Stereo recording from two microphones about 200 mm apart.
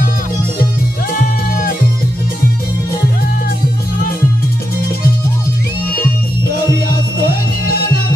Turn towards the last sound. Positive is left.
turn(degrees=50)  # may be behind; listen again after turning